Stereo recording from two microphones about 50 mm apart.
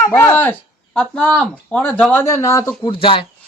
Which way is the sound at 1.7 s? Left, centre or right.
Left.